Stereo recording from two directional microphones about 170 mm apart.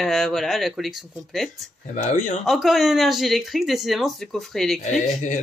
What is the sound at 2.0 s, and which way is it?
Speech, 45° left (ahead or behind).